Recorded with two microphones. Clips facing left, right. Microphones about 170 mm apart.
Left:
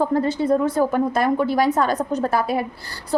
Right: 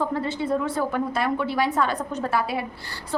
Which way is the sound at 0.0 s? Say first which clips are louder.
Left 6 dB; 40° left (ahead or behind).